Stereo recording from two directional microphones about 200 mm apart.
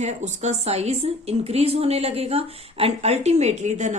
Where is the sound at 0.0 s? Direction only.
35° right (ahead or behind).